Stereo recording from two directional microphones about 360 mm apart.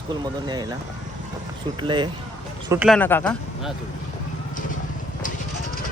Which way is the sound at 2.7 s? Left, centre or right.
Centre.